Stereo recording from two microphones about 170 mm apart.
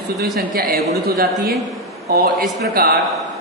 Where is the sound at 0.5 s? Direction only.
65° right (ahead or behind).